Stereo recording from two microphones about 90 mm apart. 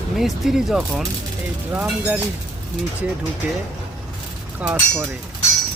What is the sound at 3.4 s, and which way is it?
Speech, 15° right (ahead or behind).